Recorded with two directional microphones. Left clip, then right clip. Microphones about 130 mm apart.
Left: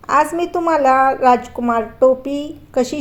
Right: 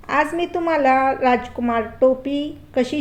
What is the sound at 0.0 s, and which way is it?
A woman's voice, 40° left (ahead or behind).